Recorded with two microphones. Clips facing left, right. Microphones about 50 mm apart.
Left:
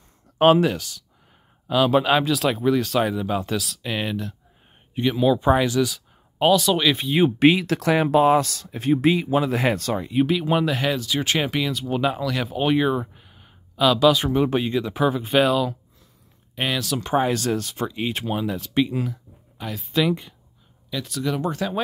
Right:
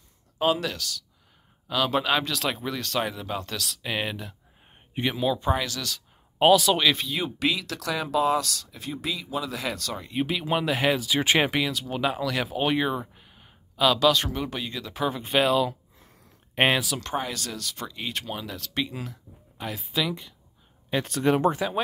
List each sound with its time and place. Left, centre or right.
0.6 s speech: left
1.7 s speech: centre
5.4 s speech: centre
7.1 s speech: left
10.0 s speech: centre
14.4 s speech: left
15.0 s speech: centre
16.6 s speech: right
17.0 s speech: centre
17.3 s speech: left; by 20.1 s centre
20.1 s speech: centre
20.9 s speech: right
21.5 s speech: centre